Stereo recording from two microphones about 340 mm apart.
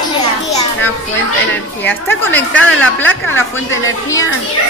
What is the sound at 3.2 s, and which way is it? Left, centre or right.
Speech, left.